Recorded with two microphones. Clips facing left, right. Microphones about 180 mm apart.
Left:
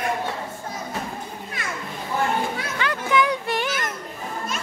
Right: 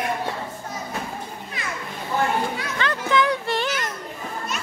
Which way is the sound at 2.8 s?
10° left (ahead or behind).